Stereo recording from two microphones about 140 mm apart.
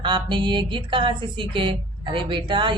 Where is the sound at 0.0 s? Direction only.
35° right (ahead or behind).